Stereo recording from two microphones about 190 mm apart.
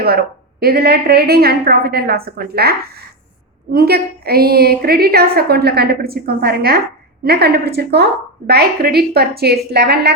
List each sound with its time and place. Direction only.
0.0 s a woman's voice: 55° right (ahead or behind)